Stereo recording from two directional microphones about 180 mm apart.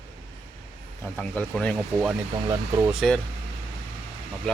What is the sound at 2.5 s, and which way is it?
Speech, 15° right (ahead or behind).